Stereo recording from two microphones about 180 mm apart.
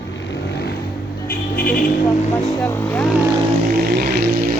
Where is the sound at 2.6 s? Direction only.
10° left (ahead or behind).